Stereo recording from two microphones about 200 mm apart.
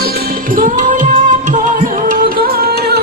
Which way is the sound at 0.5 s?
40° right (ahead or behind).